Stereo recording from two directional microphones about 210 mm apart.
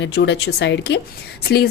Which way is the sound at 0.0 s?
50° left (ahead or behind).